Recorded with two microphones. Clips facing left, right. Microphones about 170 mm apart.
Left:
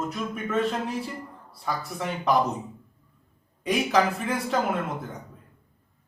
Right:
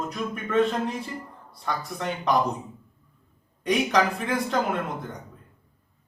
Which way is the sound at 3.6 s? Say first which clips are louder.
Even; centre (ahead or behind).